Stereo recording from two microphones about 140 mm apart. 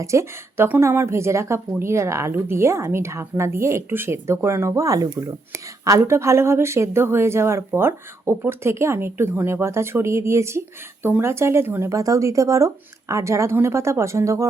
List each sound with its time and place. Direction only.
0.0 s speech: 20° right (ahead or behind)